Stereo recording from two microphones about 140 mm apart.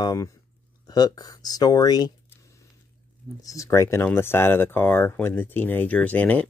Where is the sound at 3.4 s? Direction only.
25° left (ahead or behind).